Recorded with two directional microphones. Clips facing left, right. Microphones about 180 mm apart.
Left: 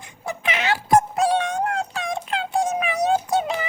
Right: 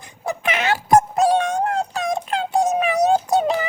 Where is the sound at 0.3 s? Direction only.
50° right (ahead or behind).